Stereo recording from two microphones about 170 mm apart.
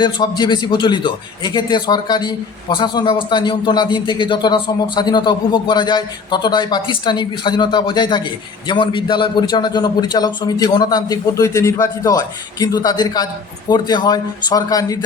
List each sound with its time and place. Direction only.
0.0 s a man's voice: 25° left (ahead or behind)